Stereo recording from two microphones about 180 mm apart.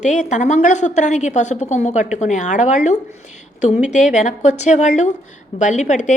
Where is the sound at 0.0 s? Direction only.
40° left (ahead or behind).